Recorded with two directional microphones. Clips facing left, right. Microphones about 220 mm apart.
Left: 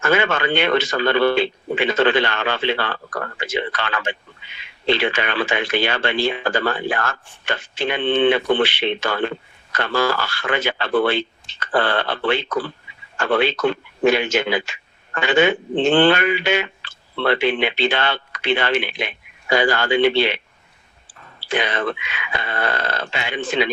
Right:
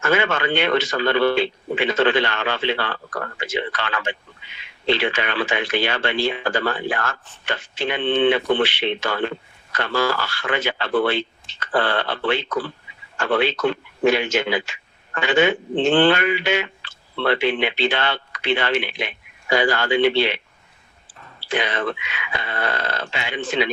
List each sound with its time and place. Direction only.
0.0 s speech: 55° left (ahead or behind)
21.5 s speech: 55° left (ahead or behind)